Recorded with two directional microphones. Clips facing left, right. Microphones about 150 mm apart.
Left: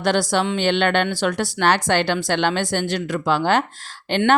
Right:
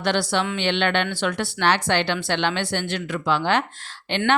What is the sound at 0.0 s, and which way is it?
Speech, 40° left (ahead or behind).